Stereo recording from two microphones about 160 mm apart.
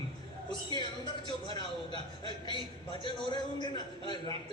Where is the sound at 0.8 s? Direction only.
30° left (ahead or behind).